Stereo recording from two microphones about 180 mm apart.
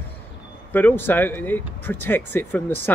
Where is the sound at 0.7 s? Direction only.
10° left (ahead or behind).